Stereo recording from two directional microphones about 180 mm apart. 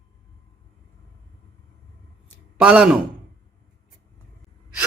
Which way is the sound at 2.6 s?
5° right (ahead or behind).